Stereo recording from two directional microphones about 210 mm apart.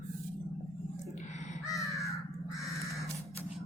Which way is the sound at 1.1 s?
35° left (ahead or behind).